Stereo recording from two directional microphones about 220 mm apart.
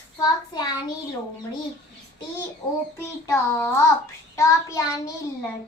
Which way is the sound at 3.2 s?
10° left (ahead or behind).